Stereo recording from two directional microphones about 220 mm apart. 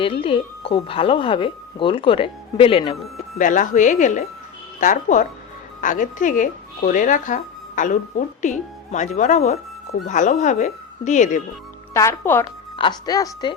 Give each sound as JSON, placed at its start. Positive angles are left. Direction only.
{"t": 0.0, "sound": "speech", "side_deg": 25}
{"t": 11.9, "sound": "speech", "side_deg": 10}
{"t": 12.7, "sound": "speech", "side_deg": 20}